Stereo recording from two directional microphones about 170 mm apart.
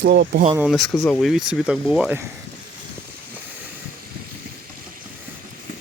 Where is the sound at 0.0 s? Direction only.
80° right.